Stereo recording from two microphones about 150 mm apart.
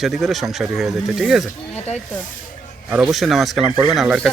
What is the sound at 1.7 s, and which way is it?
Speech, 45° left (ahead or behind).